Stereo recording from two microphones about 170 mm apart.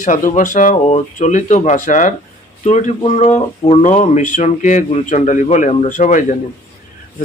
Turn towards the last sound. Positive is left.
turn(degrees=45)  # may be behind; listen again after turning